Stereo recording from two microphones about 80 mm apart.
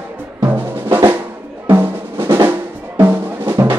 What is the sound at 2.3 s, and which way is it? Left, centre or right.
Drum, right.